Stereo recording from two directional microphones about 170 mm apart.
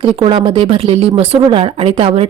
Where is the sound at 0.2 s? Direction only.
30° right (ahead or behind).